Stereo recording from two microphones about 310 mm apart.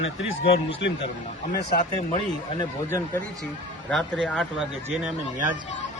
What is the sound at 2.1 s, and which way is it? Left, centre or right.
Speech, centre.